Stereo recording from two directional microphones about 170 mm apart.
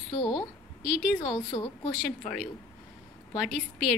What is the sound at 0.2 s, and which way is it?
A woman's voice, 25° left (ahead or behind).